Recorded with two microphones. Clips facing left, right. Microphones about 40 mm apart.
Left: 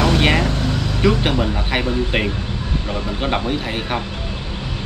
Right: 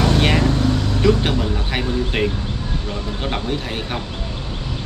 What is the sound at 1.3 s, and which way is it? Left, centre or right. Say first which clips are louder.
Speech: left 2 dB; left.